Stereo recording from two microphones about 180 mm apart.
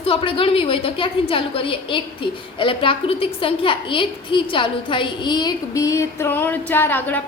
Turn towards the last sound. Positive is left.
turn(degrees=10)  # may be behind; listen again after turning